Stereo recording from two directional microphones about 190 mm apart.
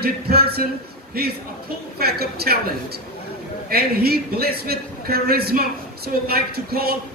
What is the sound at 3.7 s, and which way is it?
A man's voice, 55° right (ahead or behind).